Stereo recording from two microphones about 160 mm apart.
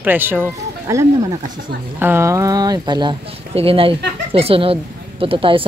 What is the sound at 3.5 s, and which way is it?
A woman's voice, 35° right (ahead or behind).